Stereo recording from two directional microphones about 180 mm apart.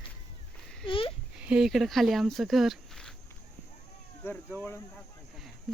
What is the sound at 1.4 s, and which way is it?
Speech, 5° right (ahead or behind).